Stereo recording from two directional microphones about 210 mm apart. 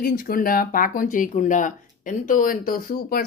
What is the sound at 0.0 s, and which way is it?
Speech, 45° left (ahead or behind).